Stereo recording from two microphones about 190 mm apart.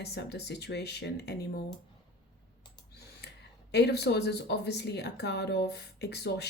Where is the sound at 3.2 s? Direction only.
60° left (ahead or behind).